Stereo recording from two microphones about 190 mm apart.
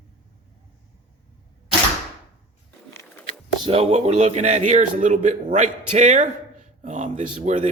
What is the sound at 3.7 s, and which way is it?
A man's voice, 35° right (ahead or behind).